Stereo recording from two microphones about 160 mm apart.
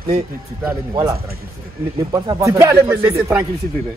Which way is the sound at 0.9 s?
20° right (ahead or behind).